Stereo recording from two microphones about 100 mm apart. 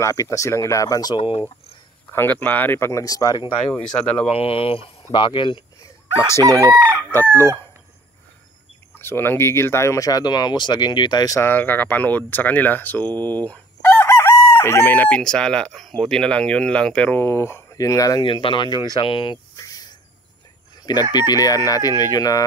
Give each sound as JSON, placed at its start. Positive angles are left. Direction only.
{"t": 0.0, "sound": "speech", "side_deg": 35}
{"t": 2.4, "sound": "speech", "side_deg": 15}
{"t": 3.7, "sound": "chicken", "side_deg": 10}
{"t": 4.3, "sound": "speech", "side_deg": 70}
{"t": 5.1, "sound": "speech", "side_deg": 55}
{"t": 6.4, "sound": "chicken", "side_deg": -40}
{"t": 7.2, "sound": "chicken", "side_deg": -25}
{"t": 8.9, "sound": "speech", "side_deg": 20}
{"t": 11.4, "sound": "chicken", "side_deg": 20}
{"t": 17.1, "sound": "speech", "side_deg": 25}
{"t": 18.2, "sound": "speech", "side_deg": 60}
{"t": 19.5, "sound": "snake", "side_deg": 40}
{"t": 20.8, "sound": "speech", "side_deg": 45}